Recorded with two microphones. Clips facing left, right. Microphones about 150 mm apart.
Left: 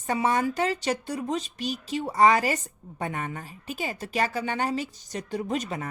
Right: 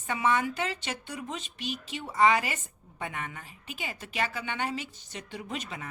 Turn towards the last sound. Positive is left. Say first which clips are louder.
# left 8 dB
turn(degrees=40)  # may be behind; listen again after turning